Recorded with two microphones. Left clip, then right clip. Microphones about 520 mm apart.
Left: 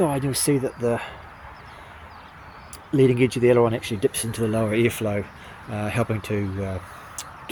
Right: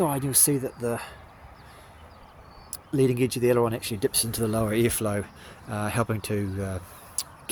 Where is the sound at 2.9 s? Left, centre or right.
Right.